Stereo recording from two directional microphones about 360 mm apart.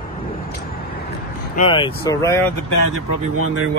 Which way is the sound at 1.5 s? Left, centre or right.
Centre.